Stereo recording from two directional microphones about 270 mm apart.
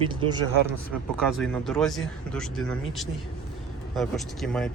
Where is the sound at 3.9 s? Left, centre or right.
Centre.